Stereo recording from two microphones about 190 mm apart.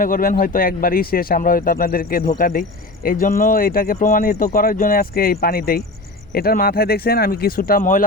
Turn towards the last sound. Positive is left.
turn(degrees=45)  # may be behind; listen again after turning